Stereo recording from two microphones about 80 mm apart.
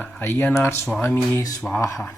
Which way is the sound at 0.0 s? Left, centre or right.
Left.